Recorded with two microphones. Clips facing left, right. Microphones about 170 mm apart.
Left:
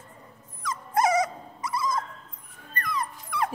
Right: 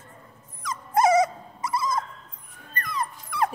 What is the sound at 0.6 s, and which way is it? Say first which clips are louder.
Dog: right 3 dB; 20° right (ahead or behind).